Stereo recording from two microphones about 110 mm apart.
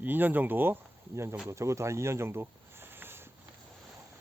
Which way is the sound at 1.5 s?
25° right (ahead or behind).